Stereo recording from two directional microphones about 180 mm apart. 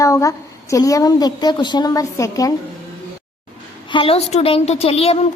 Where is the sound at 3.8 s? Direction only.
30° left (ahead or behind).